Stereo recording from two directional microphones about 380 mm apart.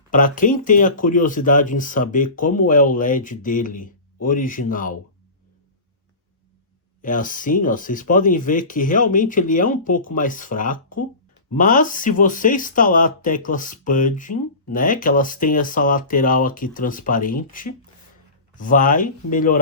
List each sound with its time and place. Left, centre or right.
0.1 s speech: left
7.0 s speech: left